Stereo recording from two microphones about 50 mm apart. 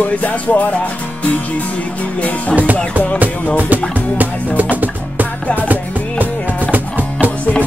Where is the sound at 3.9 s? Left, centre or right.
Right.